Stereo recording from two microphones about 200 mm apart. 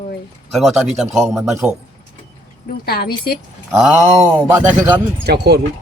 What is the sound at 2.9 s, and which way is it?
Speech, 50° left (ahead or behind).